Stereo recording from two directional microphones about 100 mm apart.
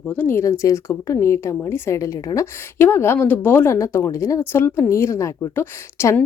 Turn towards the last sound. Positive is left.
turn(degrees=30)  # may be behind; listen again after turning